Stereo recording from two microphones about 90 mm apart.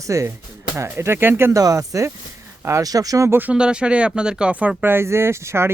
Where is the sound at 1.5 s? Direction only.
40° right (ahead or behind).